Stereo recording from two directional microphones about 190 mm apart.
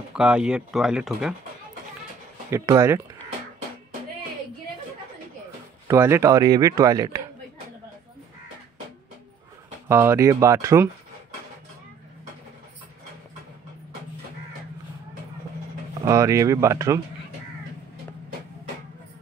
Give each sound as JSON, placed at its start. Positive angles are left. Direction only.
{"t": 0.1, "sound": "speech", "side_deg": -5}
{"t": 2.5, "sound": "speech", "side_deg": -15}
{"t": 5.9, "sound": "speech", "side_deg": -15}
{"t": 9.8, "sound": "speech", "side_deg": -15}
{"t": 16.0, "sound": "speech", "side_deg": -15}